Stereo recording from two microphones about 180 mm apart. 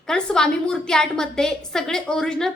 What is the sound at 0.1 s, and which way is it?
A woman's voice, 5° left (ahead or behind).